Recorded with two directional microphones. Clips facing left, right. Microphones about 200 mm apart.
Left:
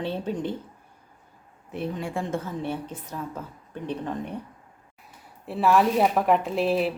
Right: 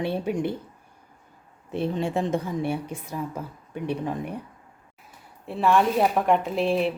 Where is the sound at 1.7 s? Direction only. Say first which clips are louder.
Right 4 dB; 25° right (ahead or behind); by 4.4 s 10° right (ahead or behind).